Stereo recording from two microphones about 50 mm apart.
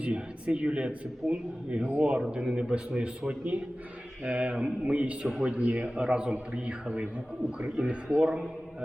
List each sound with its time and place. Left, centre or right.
0.0 s a man's voice: right
2.2 s a man's voice: centre
7.8 s a man's voice: centre